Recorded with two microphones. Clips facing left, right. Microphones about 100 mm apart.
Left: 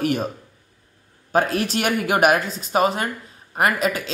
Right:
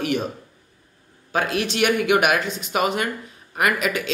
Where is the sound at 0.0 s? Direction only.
40° left (ahead or behind).